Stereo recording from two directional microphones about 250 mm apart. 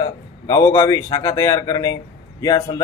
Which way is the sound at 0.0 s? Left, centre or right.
Centre.